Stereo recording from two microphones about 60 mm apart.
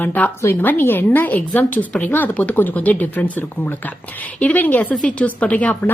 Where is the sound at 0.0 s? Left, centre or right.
Left.